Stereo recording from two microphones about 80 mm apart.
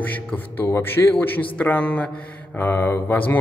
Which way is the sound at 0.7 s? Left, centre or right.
Left.